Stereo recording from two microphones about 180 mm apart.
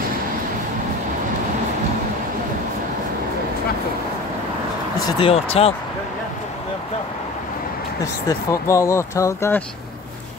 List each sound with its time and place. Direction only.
5.0 s speech: 30° left (ahead or behind)
8.0 s speech: 15° left (ahead or behind)